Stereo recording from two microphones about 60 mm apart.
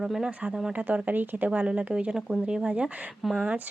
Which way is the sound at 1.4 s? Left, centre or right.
Centre.